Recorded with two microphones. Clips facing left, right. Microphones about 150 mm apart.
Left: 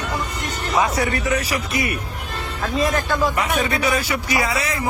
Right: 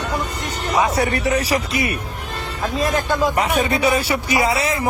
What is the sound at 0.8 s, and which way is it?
Speech, 30° right (ahead or behind).